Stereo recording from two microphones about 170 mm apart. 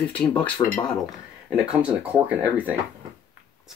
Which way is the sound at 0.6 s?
25° left (ahead or behind).